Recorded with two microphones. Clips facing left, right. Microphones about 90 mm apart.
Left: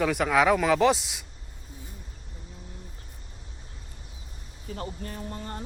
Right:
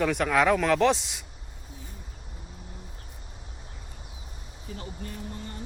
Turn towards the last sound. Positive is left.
turn(degrees=50)  # may be behind; listen again after turning